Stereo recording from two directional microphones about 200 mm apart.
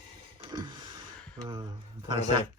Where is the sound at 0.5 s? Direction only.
20° right (ahead or behind).